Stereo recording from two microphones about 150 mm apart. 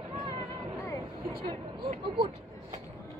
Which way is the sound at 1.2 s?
35° right (ahead or behind).